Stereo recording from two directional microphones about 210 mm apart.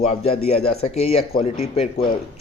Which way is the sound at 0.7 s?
30° left (ahead or behind).